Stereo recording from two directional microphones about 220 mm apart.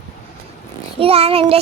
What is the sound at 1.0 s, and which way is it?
Speech, 25° right (ahead or behind).